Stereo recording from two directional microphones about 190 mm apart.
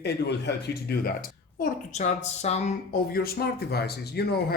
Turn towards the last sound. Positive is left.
turn(degrees=55)  # may be behind; listen again after turning